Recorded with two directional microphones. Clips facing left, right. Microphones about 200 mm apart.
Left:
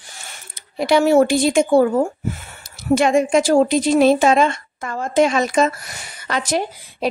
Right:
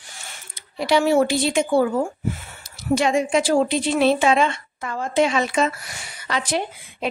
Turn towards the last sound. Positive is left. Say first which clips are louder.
# left 4 dB
turn(degrees=40)  # may be behind; listen again after turning